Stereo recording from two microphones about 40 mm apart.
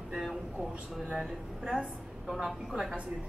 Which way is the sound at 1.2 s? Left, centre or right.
Centre.